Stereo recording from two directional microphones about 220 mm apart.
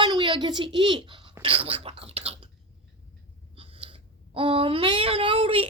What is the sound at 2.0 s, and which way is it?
Chewing, 25° right (ahead or behind).